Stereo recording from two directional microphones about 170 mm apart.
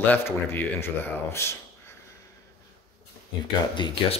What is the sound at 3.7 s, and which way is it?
Speech, 30° left (ahead or behind).